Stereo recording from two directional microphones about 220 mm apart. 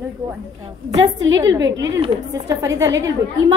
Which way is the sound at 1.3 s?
15° right (ahead or behind).